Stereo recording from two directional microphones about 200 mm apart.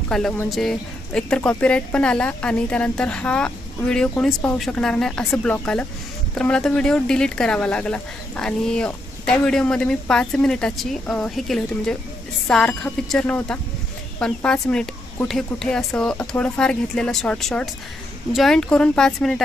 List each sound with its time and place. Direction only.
0.1 s speech: 5° left (ahead or behind)